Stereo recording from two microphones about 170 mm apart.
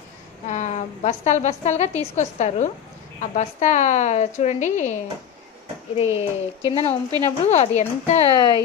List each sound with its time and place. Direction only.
0.5 s a woman's voice: 40° left (ahead or behind)
5.9 s speech: 35° left (ahead or behind)
8.4 s speech: 20° left (ahead or behind)